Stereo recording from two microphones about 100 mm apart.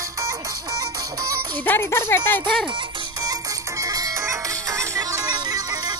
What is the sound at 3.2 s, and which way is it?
Music, 35° right (ahead or behind).